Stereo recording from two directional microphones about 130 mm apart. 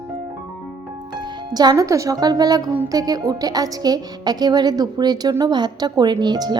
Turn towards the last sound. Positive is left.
turn(degrees=-35)  # may be behind; listen again after turning